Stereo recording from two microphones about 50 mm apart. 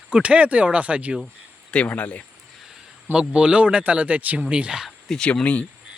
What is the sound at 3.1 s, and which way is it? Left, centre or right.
Speech, centre.